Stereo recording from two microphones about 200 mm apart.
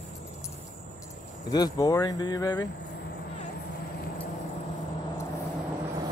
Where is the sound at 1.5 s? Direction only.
20° left (ahead or behind).